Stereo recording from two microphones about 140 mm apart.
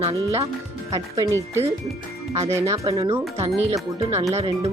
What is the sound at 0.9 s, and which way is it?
Speech, 25° right (ahead or behind).